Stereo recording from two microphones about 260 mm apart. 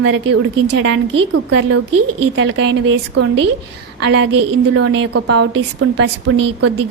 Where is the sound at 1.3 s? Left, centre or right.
Right.